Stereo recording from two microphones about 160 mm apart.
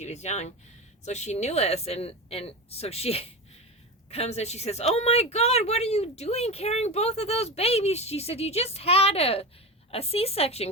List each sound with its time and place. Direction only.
0.0 s speech: 45° left (ahead or behind)